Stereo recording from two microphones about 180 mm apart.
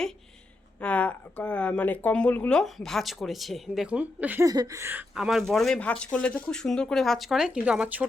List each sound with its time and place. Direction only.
0.8 s speech: 5° left (ahead or behind); by 4.4 s 10° right (ahead or behind)
4.4 s a sound: 20° right (ahead or behind)
5.1 s speech: centre (ahead or behind)